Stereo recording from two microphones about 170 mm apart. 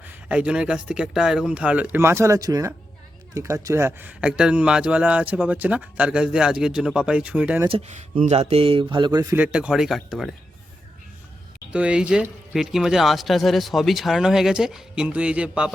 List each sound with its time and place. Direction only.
0.0 s speech: 10° right (ahead or behind)
7.7 s speech: 45° right (ahead or behind); by 9.3 s 25° right (ahead or behind)
9.3 s speech: 5° right (ahead or behind)
11.7 s speech: 5° right (ahead or behind)